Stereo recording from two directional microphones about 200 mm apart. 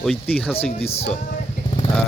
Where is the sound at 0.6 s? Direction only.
30° left (ahead or behind).